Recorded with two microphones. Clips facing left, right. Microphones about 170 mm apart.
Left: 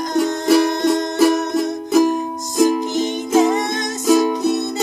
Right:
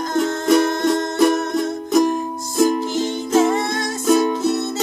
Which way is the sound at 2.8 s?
20° left (ahead or behind).